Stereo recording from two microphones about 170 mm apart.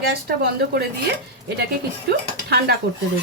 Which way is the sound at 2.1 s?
75° right (ahead or behind).